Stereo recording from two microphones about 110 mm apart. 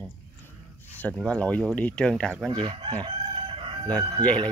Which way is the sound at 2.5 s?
45° right (ahead or behind).